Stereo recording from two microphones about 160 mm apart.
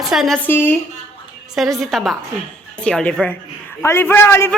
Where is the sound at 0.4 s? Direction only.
15° left (ahead or behind).